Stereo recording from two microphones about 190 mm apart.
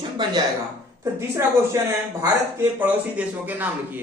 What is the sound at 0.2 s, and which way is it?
Speech, 20° right (ahead or behind).